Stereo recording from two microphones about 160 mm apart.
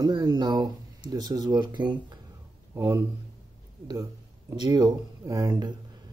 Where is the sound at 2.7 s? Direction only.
15° right (ahead or behind).